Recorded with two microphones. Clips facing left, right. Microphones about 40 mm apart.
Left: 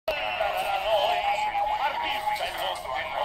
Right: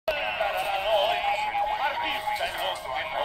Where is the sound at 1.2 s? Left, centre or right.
Right.